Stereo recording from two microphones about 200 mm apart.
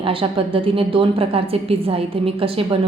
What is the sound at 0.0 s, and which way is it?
A woman's voice, 25° right (ahead or behind).